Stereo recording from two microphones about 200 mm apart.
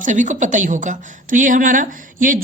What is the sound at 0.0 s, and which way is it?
A woman's voice, 40° right (ahead or behind).